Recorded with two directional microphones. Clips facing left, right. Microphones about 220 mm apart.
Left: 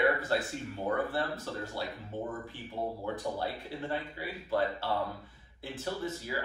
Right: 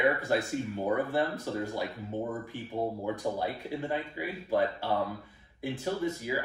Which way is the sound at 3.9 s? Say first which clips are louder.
Right 3 dB; 15° right (ahead or behind).